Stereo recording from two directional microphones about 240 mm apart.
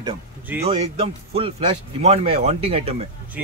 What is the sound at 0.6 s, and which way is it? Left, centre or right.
Speech, right.